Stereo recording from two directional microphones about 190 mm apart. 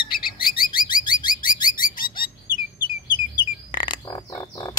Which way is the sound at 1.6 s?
45° left (ahead or behind).